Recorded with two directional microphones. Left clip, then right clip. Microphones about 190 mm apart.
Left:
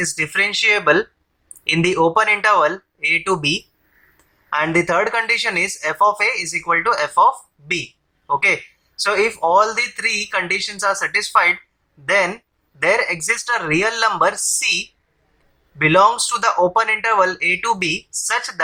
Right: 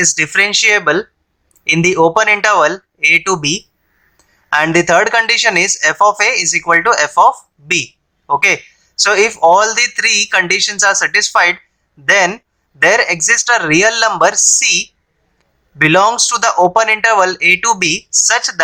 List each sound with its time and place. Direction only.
0.0 s speech: 35° right (ahead or behind)